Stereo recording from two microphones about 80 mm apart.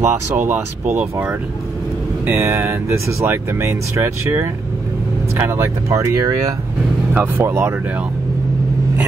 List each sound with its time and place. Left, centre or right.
0.0 s speech: right
2.3 s speech: right
5.9 s speech: right
7.2 s speech: right